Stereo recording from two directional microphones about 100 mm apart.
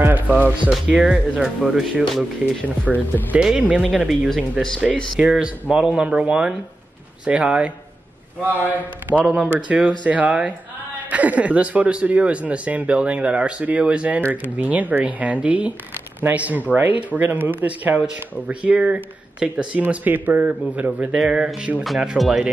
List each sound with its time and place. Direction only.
0.7 s speech: 10° right (ahead or behind)
4.6 s speech: 5° left (ahead or behind)
5.1 s speech: 5° right (ahead or behind)